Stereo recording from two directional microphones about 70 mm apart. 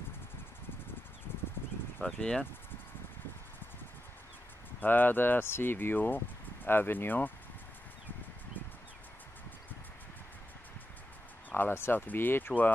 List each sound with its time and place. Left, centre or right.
2.1 s speech: centre
4.7 s speech: left
11.5 s speech: left